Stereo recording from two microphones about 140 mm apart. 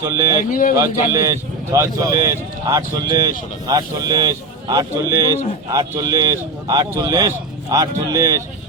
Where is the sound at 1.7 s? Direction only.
25° right (ahead or behind).